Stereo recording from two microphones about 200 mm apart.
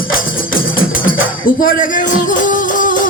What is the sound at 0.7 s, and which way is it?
Music, 45° left (ahead or behind).